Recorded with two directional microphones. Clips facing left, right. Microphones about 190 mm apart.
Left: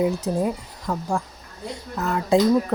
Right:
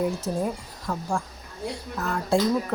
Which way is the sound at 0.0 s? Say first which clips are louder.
Left 4 dB; 20° left (ahead or behind).